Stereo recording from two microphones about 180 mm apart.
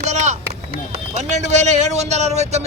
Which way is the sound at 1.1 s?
40° right (ahead or behind).